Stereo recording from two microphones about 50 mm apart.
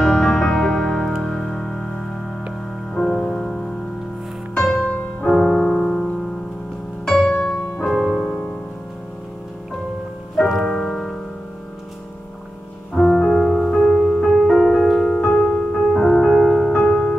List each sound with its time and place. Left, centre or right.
0.0 s music: centre
7.8 s music: centre
10.6 s music: centre
12.9 s music: centre